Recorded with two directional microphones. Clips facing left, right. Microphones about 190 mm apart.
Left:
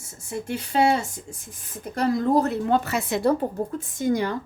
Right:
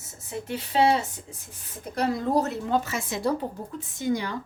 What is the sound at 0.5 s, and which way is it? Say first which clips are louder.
Speech: left 1 dB; 45° left (ahead or behind).